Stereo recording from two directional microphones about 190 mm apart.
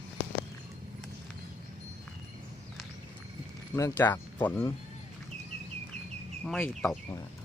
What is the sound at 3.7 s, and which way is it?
Speech, 15° left (ahead or behind).